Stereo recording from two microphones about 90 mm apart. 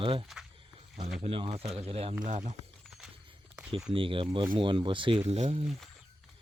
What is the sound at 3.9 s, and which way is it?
Speech, 75° right (ahead or behind).